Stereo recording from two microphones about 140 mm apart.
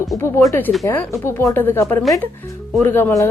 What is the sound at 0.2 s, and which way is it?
A woman's voice, 15° left (ahead or behind).